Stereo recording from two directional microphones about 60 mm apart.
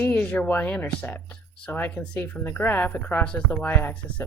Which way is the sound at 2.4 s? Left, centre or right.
Left.